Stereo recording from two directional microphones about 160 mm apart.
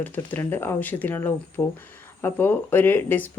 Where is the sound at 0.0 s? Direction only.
10° left (ahead or behind).